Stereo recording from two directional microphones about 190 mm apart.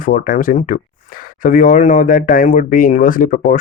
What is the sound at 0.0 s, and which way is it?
Speech, 45° left (ahead or behind).